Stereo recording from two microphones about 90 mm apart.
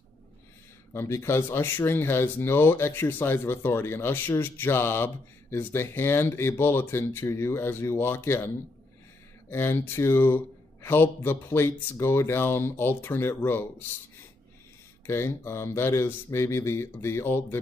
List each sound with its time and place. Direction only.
0.9 s speech: 30° left (ahead or behind)
9.5 s speech: 25° left (ahead or behind)
15.0 s speech: 30° left (ahead or behind)